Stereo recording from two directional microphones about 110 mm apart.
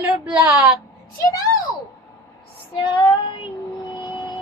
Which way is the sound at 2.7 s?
50° left (ahead or behind).